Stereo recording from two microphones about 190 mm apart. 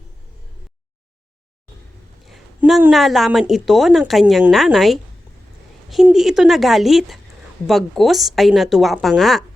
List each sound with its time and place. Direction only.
2.2 s a woman's voice: centre (ahead or behind)